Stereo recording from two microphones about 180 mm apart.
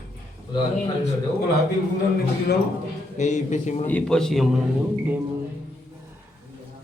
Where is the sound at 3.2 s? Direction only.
40° left (ahead or behind).